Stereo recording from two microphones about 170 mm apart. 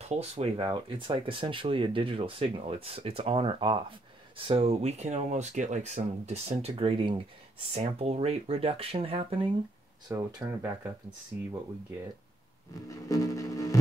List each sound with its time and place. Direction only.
0.1 s speech: 35° right (ahead or behind)
10.0 s speech: 20° right (ahead or behind)
12.8 s music: 20° left (ahead or behind)